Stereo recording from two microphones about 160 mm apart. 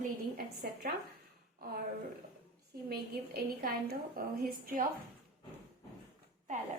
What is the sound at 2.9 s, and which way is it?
A woman's voice, 75° right (ahead or behind).